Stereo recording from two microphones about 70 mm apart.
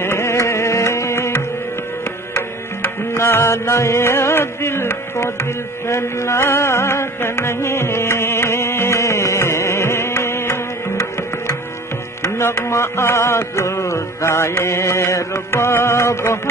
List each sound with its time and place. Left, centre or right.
0.0 s music: left
3.2 s music: left
5.2 s carnatic music: left
12.2 s music: left